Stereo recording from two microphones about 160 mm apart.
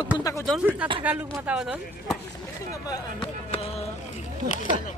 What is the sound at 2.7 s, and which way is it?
Speech, 20° left (ahead or behind).